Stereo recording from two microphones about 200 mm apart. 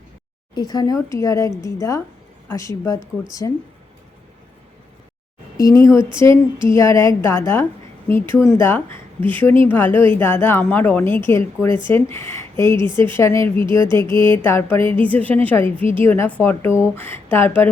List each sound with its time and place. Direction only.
0.5 s speech: 20° left (ahead or behind)
5.5 s speech: 15° left (ahead or behind)
13.7 s music: 25° right (ahead or behind)
14.1 s speech: 10° left (ahead or behind)